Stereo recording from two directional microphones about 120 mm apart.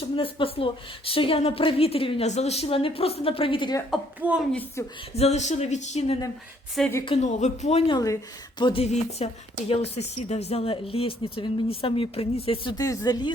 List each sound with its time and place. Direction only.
0.2 s speech: 50° left (ahead or behind)
2.2 s speech: 65° left (ahead or behind); by 3.8 s 45° left (ahead or behind)
4.2 s a woman's voice: 15° right (ahead or behind)
4.8 s speech: 20° left (ahead or behind)
5.1 s speech: 65° left (ahead or behind)
7.0 s speech: 50° left (ahead or behind)
7.3 s speech: 75° left (ahead or behind)
7.9 s speech: 30° left (ahead or behind)
8.8 s speech: 65° left (ahead or behind)
12.7 s speech: 30° left (ahead or behind)